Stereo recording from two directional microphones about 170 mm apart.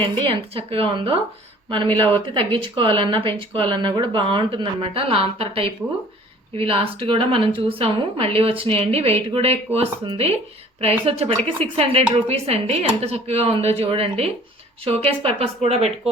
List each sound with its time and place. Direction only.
0.0 s a woman's voice: 30° right (ahead or behind)